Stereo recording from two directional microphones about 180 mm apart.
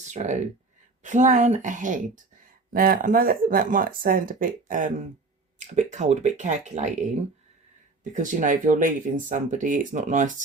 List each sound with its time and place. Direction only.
0.1 s speech: 40° right (ahead or behind)
8.1 s speech: 45° right (ahead or behind)